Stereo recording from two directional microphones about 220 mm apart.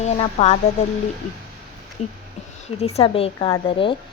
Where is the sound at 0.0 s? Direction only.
30° left (ahead or behind).